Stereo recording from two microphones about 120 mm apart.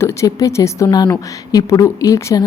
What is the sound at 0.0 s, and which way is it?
A woman's voice, 25° left (ahead or behind).